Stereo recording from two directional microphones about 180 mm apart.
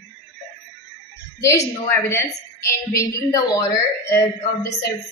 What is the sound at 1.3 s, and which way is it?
A woman's voice, 15° left (ahead or behind).